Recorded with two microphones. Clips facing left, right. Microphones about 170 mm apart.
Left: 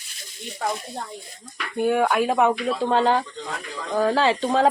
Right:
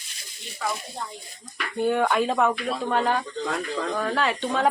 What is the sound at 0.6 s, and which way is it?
Speech, 50° left (ahead or behind).